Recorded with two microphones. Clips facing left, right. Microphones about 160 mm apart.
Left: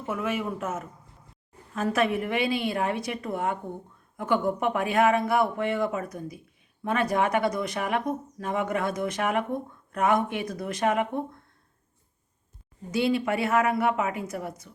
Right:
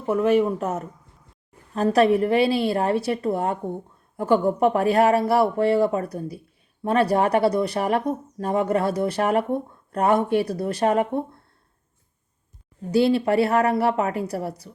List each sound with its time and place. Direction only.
0.0 s speech: 35° right (ahead or behind)
12.9 s speech: 30° right (ahead or behind)